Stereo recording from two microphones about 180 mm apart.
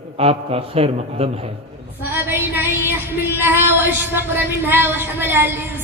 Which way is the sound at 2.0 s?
10° right (ahead or behind).